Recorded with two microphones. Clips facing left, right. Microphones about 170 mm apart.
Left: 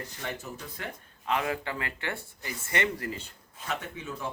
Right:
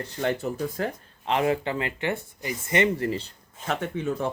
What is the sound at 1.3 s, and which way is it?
Speech, 25° right (ahead or behind).